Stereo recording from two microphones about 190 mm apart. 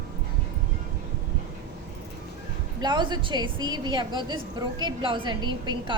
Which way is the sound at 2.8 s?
25° right (ahead or behind).